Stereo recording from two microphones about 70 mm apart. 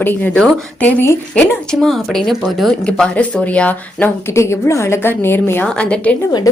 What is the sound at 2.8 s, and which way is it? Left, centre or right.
Speech, centre.